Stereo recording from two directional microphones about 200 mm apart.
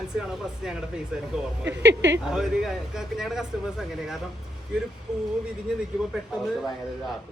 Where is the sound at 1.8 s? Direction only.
60° right (ahead or behind).